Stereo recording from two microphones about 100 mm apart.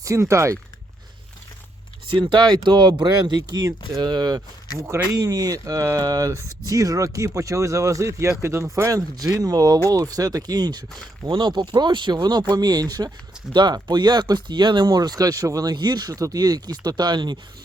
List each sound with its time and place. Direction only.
0.0 s speech: 30° right (ahead or behind)
2.0 s speech: 50° right (ahead or behind)